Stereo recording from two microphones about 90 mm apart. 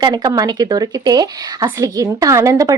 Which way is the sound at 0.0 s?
50° right (ahead or behind).